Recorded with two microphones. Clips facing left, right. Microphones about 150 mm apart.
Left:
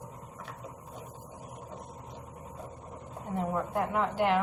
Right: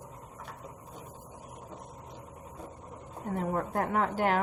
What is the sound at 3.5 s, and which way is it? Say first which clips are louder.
Speech: right 1 dB; 50° right (ahead or behind).